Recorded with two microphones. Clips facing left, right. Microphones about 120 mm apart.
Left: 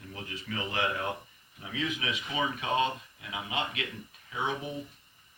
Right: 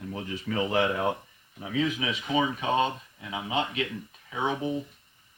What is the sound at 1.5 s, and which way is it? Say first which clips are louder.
Speech: right 7 dB; 35° right (ahead or behind).